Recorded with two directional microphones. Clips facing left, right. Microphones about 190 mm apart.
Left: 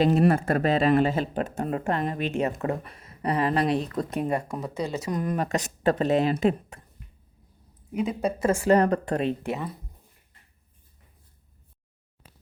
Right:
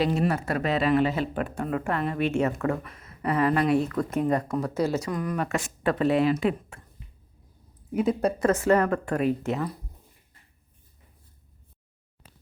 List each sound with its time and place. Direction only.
0.0 s speech: 45° left (ahead or behind)
0.6 s speech: 35° left (ahead or behind)
0.9 s speech: 45° left (ahead or behind)
1.5 s speech: 30° left (ahead or behind)
2.2 s speech: 20° left (ahead or behind)
4.1 s speech: 15° left (ahead or behind)
4.7 s a woman's voice: 5° right (ahead or behind)
5.0 s speech: 25° left (ahead or behind)
5.4 s speech: 40° left (ahead or behind)
7.9 s a woman's voice: centre (ahead or behind)
8.8 s speech: 25° left (ahead or behind)
9.5 s a woman's voice: centre (ahead or behind)